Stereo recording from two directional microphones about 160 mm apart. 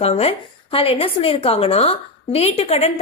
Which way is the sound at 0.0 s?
40° left (ahead or behind).